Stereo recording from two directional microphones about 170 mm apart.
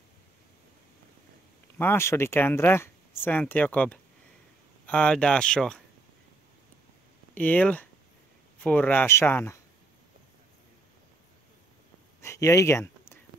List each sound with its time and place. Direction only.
1.8 s speech: 15° left (ahead or behind)
7.3 s speech: 10° left (ahead or behind)
12.2 s a sound: 15° left (ahead or behind)